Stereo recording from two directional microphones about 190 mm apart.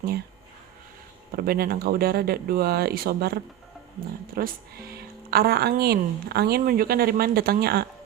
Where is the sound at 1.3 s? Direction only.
50° right (ahead or behind).